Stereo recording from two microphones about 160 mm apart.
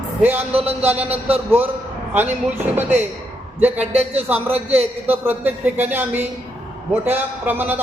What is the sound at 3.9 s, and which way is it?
Speech, 40° right (ahead or behind).